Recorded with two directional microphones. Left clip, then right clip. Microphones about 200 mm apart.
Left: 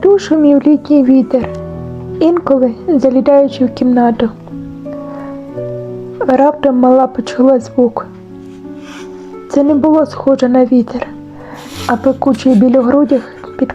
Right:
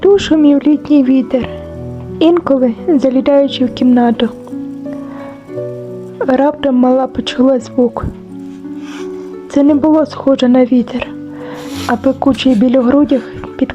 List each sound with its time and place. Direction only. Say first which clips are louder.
0.0 s a woman's voice: even; centre (ahead or behind)
6.1 s a woman's voice: left 2 dB; centre (ahead or behind)
9.5 s a woman's voice: even; centre (ahead or behind)